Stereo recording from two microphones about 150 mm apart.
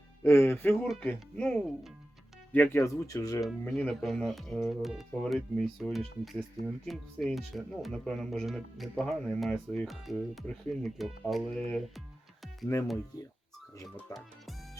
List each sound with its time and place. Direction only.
0.2 s speech: 15° left (ahead or behind)
3.7 s speech: 5° left (ahead or behind)
12.7 s speech: 20° left (ahead or behind)
14.1 s speech: 20° left (ahead or behind)